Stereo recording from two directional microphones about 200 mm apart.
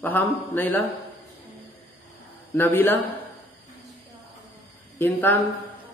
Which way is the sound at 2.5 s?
10° left (ahead or behind).